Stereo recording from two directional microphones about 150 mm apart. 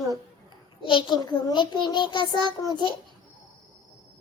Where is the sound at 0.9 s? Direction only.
30° left (ahead or behind).